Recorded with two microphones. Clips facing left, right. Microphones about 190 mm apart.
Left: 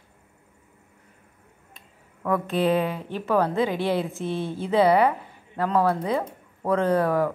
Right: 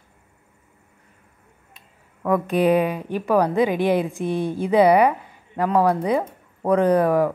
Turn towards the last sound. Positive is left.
turn(degrees=-15)  # may be behind; listen again after turning